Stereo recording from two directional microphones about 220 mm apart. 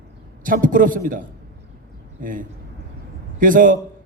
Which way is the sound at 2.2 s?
40° right (ahead or behind).